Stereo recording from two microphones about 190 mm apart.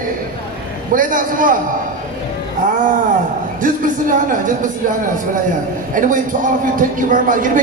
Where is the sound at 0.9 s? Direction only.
45° right (ahead or behind).